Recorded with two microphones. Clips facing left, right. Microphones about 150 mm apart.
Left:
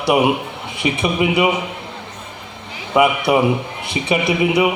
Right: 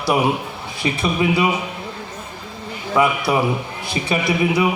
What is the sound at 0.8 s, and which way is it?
Speech, 20° left (ahead or behind).